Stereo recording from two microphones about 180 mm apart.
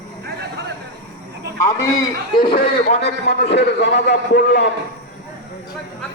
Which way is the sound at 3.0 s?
70° left (ahead or behind).